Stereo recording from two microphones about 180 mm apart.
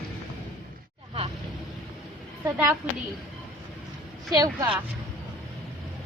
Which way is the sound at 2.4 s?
10° right (ahead or behind).